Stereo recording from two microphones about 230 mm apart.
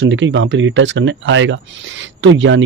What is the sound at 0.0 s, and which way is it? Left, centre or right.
Speech, right.